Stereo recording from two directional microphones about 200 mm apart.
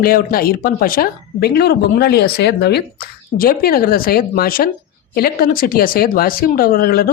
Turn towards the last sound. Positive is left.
turn(degrees=45)  # may be behind; listen again after turning